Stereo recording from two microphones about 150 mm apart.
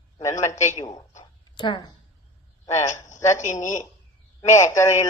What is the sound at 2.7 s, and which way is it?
Speech, 55° left (ahead or behind).